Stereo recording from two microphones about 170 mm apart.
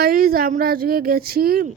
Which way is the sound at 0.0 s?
60° right (ahead or behind).